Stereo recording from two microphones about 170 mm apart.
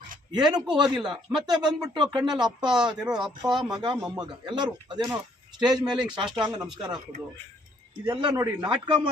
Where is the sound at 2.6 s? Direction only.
5° right (ahead or behind).